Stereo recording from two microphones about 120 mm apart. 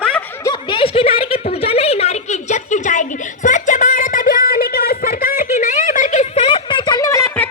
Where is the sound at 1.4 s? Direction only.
55° left (ahead or behind); by 4.2 s 90° left.